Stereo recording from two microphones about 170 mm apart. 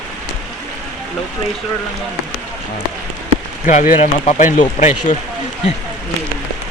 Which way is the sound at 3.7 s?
45° left (ahead or behind).